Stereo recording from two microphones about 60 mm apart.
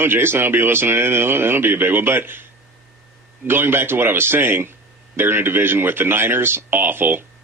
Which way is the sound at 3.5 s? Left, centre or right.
Right.